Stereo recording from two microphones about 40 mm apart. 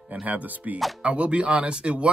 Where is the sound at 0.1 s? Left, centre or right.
Right.